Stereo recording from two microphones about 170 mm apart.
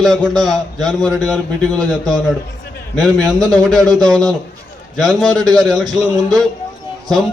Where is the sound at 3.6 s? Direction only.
5° left (ahead or behind).